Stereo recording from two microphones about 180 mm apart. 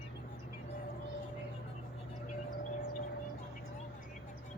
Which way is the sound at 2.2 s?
50° left (ahead or behind).